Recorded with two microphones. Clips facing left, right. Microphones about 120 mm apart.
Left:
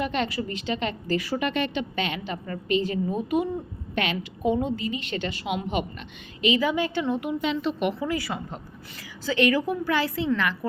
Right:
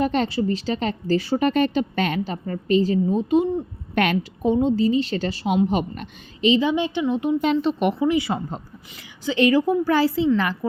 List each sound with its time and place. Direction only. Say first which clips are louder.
0.0 s a woman's voice: right 6 dB; 35° right (ahead or behind)
3.9 s a woman's voice: right 7 dB; 50° right (ahead or behind)
4.4 s a woman's voice: right 6 dB; 30° right (ahead or behind)
6.4 s a woman's voice: right 4 dB; 25° right (ahead or behind)
8.3 s a woman's voice: right 6 dB; 30° right (ahead or behind)